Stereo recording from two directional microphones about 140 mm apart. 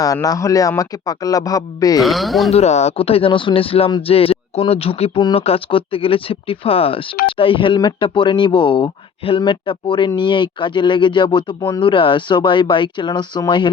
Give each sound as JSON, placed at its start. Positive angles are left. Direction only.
{"t": 0.0, "sound": "speech", "side_deg": 25}
{"t": 2.0, "sound": "speech", "side_deg": 0}
{"t": 2.5, "sound": "speech", "side_deg": 50}